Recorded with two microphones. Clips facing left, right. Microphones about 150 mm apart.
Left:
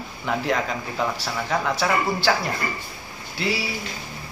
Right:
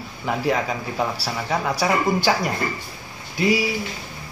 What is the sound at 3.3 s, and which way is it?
Speech, 15° right (ahead or behind).